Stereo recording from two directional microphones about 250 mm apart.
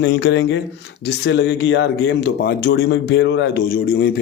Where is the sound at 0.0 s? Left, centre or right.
Left.